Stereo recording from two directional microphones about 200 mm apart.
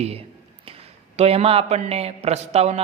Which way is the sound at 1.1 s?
30° right (ahead or behind).